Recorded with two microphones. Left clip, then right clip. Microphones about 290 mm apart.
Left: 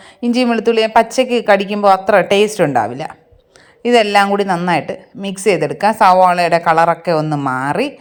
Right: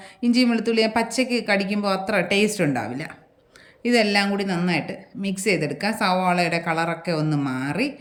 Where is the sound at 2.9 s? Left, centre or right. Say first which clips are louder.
Left 8 dB; centre.